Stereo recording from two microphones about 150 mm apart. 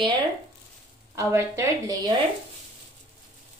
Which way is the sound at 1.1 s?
20° right (ahead or behind).